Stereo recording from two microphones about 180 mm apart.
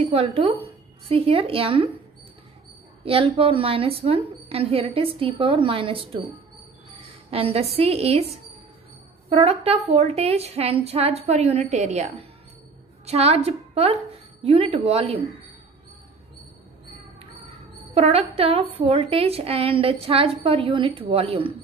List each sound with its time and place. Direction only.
0.0 s speech: 35° right (ahead or behind)
3.1 s a woman's voice: 30° right (ahead or behind)
7.2 s a woman's voice: 30° right (ahead or behind)
9.3 s a woman's voice: 35° right (ahead or behind)
17.9 s a woman's voice: 35° right (ahead or behind)